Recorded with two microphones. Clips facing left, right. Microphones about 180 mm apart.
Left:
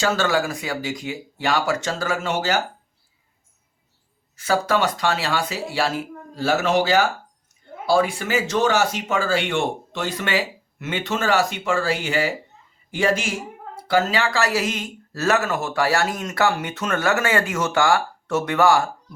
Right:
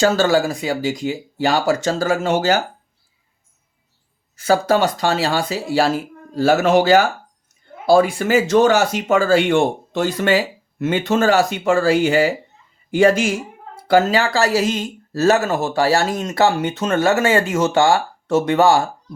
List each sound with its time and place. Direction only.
0.0 s speech: 35° right (ahead or behind)
4.4 s speech: 40° right (ahead or behind)